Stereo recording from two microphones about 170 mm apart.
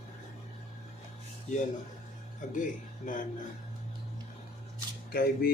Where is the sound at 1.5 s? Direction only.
45° left (ahead or behind).